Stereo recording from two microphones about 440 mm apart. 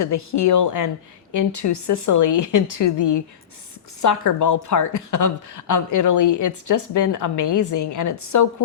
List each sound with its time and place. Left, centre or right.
0.0 s speech: left
4.0 s speech: left